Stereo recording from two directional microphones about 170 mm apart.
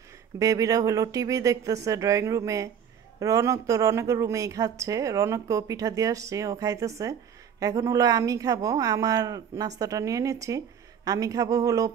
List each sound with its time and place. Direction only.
0.4 s speech: 20° right (ahead or behind)